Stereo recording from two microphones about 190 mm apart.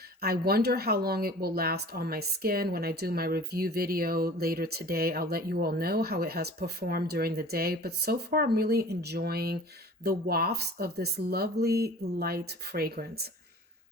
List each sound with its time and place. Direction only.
0.2 s speech: 55° right (ahead or behind)